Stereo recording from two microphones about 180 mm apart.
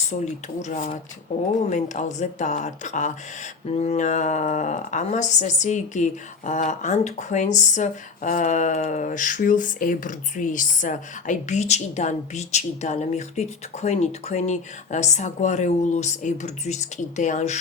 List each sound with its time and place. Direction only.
0.1 s speech: 40° left (ahead or behind)